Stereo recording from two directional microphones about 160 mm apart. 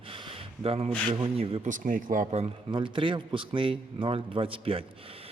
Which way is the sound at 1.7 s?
55° right (ahead or behind).